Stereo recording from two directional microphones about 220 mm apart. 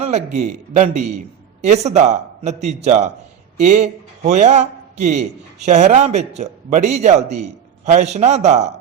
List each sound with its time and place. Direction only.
0.3 s a man's voice: 35° right (ahead or behind)